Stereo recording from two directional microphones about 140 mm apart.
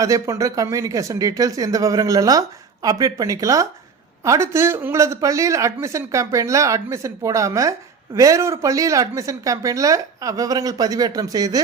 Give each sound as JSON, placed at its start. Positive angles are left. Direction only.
{"t": 0.0, "sound": "speech", "side_deg": -25}